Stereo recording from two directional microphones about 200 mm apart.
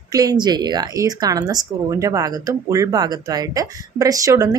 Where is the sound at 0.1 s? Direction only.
20° right (ahead or behind).